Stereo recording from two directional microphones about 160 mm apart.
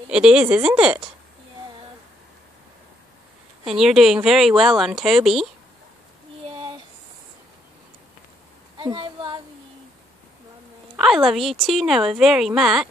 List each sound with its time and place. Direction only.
0.1 s speech: 5° right (ahead or behind)
3.6 s speech: centre (ahead or behind)
8.7 s a sound: 30° right (ahead or behind)
11.0 s speech: centre (ahead or behind)